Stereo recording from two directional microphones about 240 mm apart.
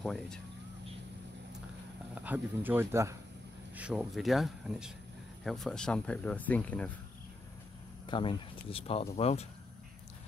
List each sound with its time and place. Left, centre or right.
0.0 s speech: centre
2.1 s speech: centre
8.1 s speech: left